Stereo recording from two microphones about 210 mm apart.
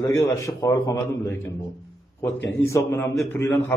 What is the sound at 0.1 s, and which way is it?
A man's voice, 15° left (ahead or behind).